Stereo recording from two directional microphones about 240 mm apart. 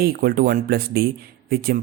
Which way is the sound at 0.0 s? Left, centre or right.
Right.